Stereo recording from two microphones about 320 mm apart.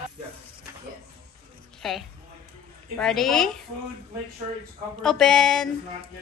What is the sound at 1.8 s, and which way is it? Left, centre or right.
Speech, centre.